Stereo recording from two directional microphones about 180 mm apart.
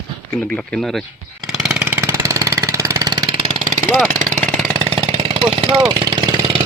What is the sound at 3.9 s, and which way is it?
Vehicle, centre (ahead or behind).